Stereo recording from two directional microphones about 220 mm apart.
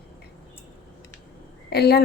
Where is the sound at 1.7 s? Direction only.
45° left (ahead or behind).